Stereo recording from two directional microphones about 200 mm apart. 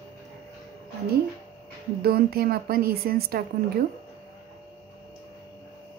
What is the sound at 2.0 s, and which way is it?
A woman's voice, 50° right (ahead or behind).